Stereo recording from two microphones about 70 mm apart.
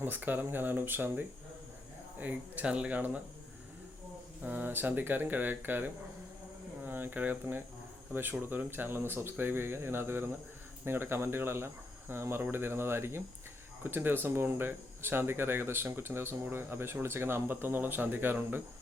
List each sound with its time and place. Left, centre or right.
0.0 s speech: right
4.4 s speech: right
6.8 s a sound: right
8.1 s speech: right